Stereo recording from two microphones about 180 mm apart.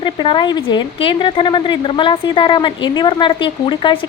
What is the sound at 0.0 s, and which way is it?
Speech, 25° left (ahead or behind).